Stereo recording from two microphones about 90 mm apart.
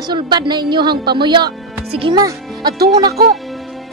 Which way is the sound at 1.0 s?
60° right (ahead or behind).